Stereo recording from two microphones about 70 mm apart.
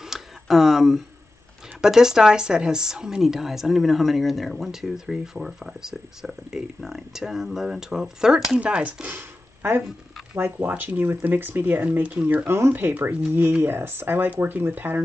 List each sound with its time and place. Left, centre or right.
0.0 s a sound: centre
1.8 s speech: centre
9.1 s a sound: right
10.4 s speech: right
12.4 s speech: right
12.7 s speech: right